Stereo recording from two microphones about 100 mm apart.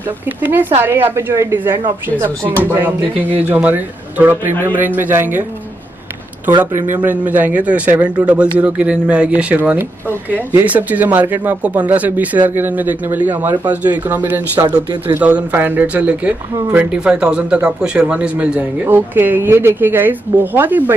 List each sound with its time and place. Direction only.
0.4 s speech: 20° right (ahead or behind)
3.3 s speech: 15° right (ahead or behind)
6.9 s speech: 15° right (ahead or behind)